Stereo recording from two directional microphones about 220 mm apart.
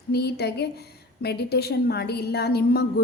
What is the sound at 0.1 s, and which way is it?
A woman's voice, 45° left (ahead or behind).